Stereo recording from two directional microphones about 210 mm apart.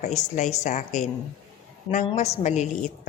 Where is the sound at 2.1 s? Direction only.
30° left (ahead or behind).